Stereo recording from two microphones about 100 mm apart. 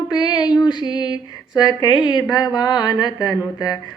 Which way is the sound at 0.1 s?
45° left (ahead or behind).